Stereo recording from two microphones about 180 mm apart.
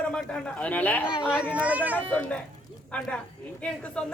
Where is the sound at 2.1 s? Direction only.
5° left (ahead or behind).